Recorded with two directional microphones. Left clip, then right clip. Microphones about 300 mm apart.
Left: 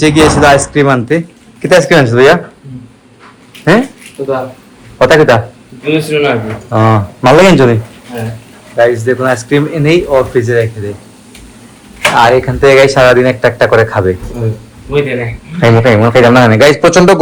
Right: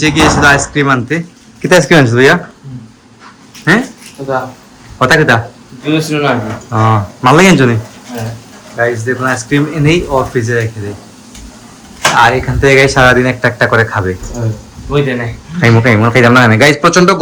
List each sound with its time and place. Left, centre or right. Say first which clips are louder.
0.0 s speech: left 2 dB; centre
3.6 s speech: left 2 dB; centre
4.9 s a man's voice: left 3 dB; centre
5.8 s a man's voice: left 2 dB; centre
6.7 s speech: left 2 dB; centre
12.1 s speech: left 2 dB; centre
15.5 s speech: left 3 dB; centre